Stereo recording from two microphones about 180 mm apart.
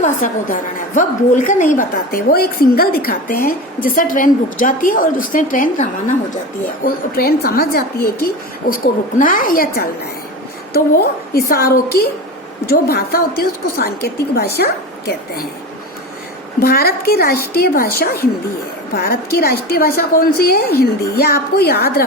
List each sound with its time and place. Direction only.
0.0 s a woman's voice: 45° left (ahead or behind)
6.8 s a woman's voice: 55° left (ahead or behind)
11.3 s a woman's voice: 55° left (ahead or behind)
16.6 s a woman's voice: 60° left (ahead or behind)